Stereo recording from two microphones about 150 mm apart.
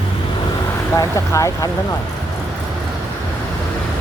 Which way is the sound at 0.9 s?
20° left (ahead or behind).